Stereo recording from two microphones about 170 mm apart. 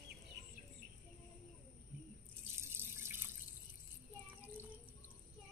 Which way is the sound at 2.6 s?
15° right (ahead or behind).